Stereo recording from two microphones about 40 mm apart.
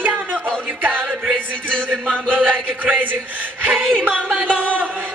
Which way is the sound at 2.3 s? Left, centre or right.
Right.